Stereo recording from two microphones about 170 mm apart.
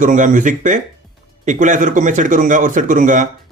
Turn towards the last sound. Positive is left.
turn(degrees=-50)  # may be behind; listen again after turning